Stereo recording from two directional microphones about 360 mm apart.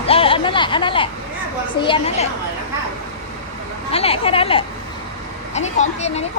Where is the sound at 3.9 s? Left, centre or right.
Centre.